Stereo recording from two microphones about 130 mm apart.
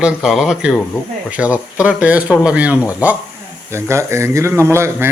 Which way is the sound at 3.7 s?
20° right (ahead or behind).